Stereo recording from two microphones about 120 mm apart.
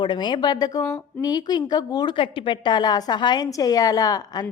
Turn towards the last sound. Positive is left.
turn(degrees=30)  # may be behind; listen again after turning